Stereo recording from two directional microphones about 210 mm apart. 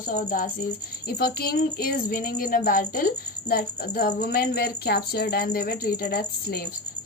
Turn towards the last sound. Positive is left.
turn(degrees=45)  # may be behind; listen again after turning